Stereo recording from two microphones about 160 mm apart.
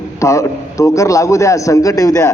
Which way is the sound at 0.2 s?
20° left (ahead or behind).